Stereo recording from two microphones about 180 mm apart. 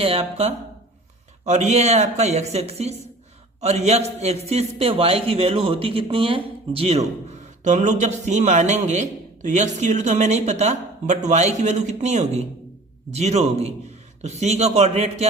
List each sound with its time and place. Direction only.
0.0 s a man's voice: 35° right (ahead or behind)